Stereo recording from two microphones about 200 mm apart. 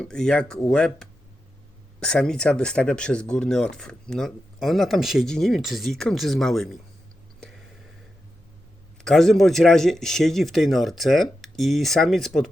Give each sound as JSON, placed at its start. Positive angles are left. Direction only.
{"t": 0.0, "sound": "speech", "side_deg": 5}
{"t": 9.0, "sound": "speech", "side_deg": 0}